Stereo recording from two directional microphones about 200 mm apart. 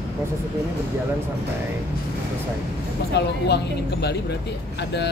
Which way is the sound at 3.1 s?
55° left (ahead or behind).